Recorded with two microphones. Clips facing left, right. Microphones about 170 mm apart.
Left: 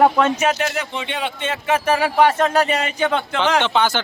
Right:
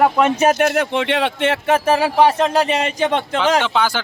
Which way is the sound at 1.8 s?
30° right (ahead or behind).